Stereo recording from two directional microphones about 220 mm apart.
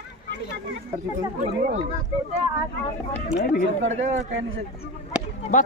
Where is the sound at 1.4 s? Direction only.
35° right (ahead or behind).